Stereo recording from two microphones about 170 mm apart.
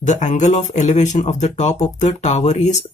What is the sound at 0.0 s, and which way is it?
Speech, 45° left (ahead or behind).